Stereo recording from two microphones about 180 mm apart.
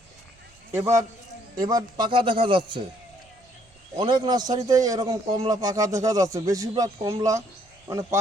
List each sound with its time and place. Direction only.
0.7 s a man's voice: 15° right (ahead or behind)
3.9 s a man's voice: 25° right (ahead or behind)